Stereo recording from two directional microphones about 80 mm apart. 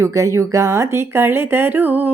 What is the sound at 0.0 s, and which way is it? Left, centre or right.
Speech, right.